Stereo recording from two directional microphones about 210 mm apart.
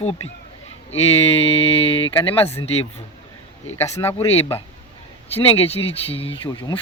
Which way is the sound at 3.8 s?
10° left (ahead or behind).